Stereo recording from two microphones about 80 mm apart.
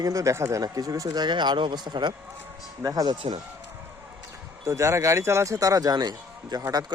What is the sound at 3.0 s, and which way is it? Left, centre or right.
Speech, right.